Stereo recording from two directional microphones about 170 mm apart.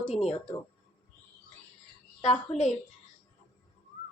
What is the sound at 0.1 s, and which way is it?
Speech, 40° left (ahead or behind).